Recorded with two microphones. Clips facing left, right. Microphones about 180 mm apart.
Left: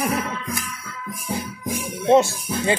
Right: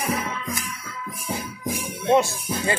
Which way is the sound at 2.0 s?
25° left (ahead or behind).